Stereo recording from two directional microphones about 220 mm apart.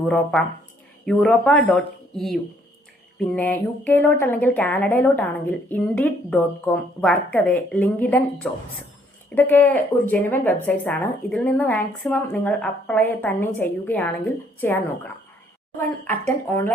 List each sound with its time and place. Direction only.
0.1 s speech: 5° left (ahead or behind)
16.0 s speech: 10° left (ahead or behind)